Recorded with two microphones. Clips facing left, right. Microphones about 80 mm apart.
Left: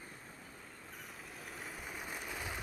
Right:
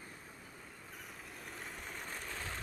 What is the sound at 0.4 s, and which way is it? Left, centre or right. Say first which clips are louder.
Vehicle: even; centre.